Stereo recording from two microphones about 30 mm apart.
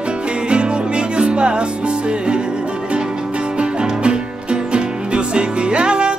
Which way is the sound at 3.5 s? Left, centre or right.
Right.